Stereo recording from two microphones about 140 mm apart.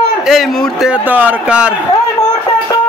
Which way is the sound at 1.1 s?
10° right (ahead or behind).